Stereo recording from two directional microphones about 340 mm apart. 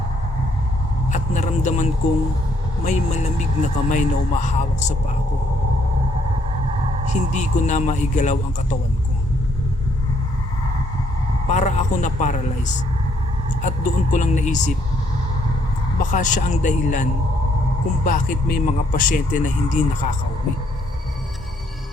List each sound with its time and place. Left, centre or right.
1.1 s speech: left
7.1 s speech: left
11.4 s speech: left
16.1 s speech: left